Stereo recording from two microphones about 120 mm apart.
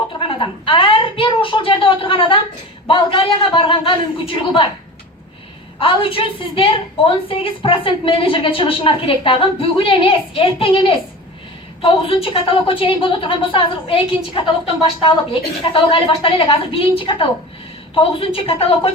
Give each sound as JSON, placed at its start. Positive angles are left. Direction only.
{"t": 0.2, "sound": "a woman's voice", "side_deg": 45}
{"t": 5.8, "sound": "a woman's voice", "side_deg": 50}